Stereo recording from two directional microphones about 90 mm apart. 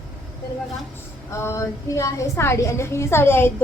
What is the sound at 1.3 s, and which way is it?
A woman's voice, 30° left (ahead or behind).